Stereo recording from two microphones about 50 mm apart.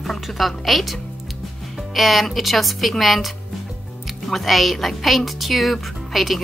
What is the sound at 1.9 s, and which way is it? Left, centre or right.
Speech, centre.